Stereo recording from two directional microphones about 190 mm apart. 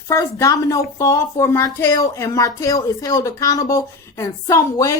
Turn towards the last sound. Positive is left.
turn(degrees=15)  # may be behind; listen again after turning